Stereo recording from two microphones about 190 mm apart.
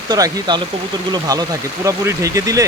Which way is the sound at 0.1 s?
20° right (ahead or behind).